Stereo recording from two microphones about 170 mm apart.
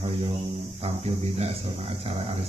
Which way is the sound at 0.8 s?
35° right (ahead or behind).